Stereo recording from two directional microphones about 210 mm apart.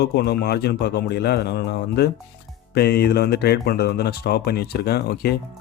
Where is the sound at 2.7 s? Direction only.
50° left (ahead or behind).